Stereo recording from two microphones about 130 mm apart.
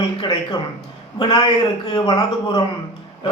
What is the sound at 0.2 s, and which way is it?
A man's voice, 30° left (ahead or behind).